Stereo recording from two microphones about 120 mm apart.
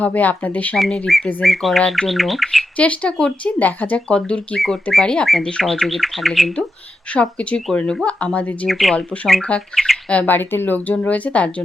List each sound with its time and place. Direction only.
0.0 s speech: 15° left (ahead or behind)